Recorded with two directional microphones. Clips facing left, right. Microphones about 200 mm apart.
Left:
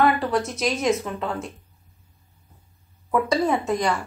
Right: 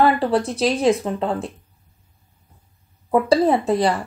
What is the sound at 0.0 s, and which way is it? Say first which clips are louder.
Speech: right 3 dB; 30° right (ahead or behind).